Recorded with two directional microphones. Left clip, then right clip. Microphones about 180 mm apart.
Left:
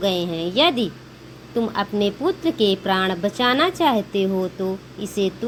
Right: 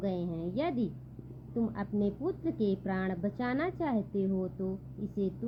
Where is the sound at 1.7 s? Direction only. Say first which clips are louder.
Left 13 dB; 15° left (ahead or behind).